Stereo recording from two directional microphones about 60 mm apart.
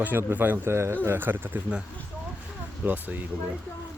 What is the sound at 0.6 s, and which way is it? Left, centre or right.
Speech, right.